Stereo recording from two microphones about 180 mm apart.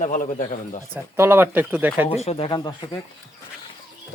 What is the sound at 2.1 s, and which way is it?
Speech, 35° left (ahead or behind).